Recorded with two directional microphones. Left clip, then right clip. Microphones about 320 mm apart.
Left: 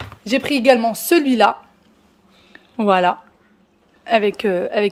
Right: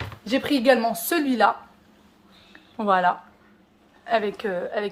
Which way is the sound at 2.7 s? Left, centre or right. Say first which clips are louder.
Left 5 dB; left.